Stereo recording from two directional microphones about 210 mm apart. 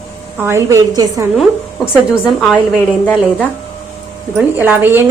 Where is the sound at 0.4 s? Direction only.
15° right (ahead or behind).